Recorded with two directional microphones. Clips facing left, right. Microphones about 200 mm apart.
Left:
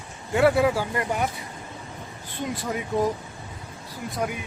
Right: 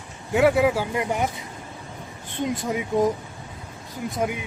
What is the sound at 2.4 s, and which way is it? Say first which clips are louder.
Speech: right 3 dB; 20° right (ahead or behind).